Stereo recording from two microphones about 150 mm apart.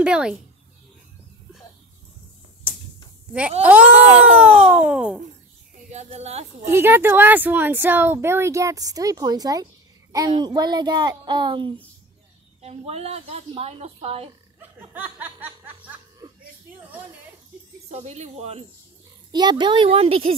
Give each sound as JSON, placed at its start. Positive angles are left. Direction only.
{"t": 0.0, "sound": "a woman's voice", "side_deg": -5}
{"t": 3.6, "sound": "a woman's voice", "side_deg": -10}
{"t": 5.9, "sound": "speech", "side_deg": -50}
{"t": 6.7, "sound": "a woman's voice", "side_deg": -15}
{"t": 12.6, "sound": "a woman's voice", "side_deg": -45}
{"t": 14.8, "sound": "music", "side_deg": -10}
{"t": 17.8, "sound": "a woman's voice", "side_deg": -45}
{"t": 19.3, "sound": "speech", "side_deg": -30}